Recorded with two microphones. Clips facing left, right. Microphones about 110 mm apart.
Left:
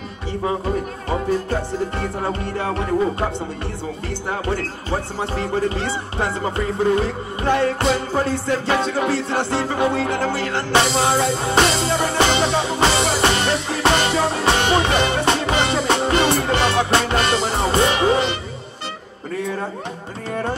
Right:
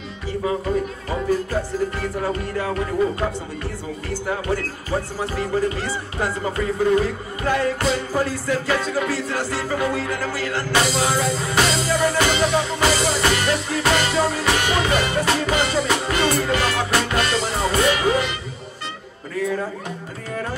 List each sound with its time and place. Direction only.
1.5 s music: 25° left (ahead or behind)